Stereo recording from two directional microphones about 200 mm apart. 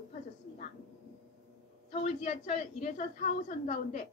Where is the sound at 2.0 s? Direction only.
35° left (ahead or behind).